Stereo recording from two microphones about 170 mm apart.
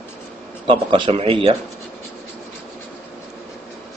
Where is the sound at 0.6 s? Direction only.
30° right (ahead or behind).